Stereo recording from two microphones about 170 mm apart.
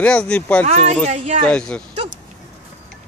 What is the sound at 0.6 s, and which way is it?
Speech, 40° right (ahead or behind).